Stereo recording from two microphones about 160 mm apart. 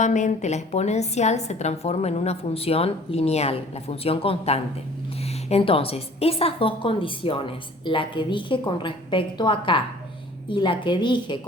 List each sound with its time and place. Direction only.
0.0 s a woman's voice: 50° left (ahead or behind); by 11.3 s 30° left (ahead or behind)